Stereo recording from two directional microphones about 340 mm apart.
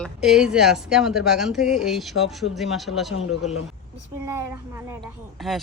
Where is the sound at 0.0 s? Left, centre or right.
Centre.